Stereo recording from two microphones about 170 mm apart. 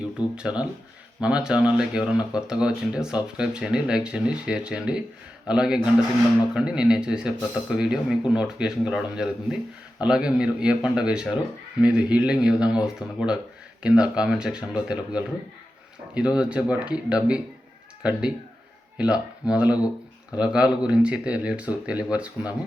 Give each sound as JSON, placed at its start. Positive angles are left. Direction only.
{"t": 0.3, "sound": "speech", "side_deg": -5}